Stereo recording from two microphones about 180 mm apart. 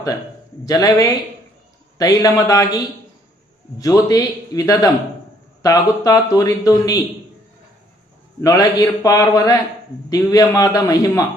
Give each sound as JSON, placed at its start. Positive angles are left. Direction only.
{"t": 0.6, "sound": "a man's voice", "side_deg": 20}
{"t": 3.8, "sound": "a man's voice", "side_deg": 20}
{"t": 8.4, "sound": "a man's voice", "side_deg": 20}